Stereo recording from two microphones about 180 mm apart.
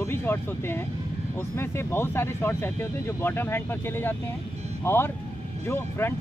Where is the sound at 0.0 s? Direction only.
15° left (ahead or behind).